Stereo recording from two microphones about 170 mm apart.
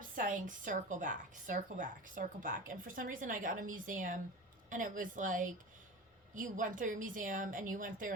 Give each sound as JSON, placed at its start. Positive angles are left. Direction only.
{"t": 0.0, "sound": "a woman's voice", "side_deg": -50}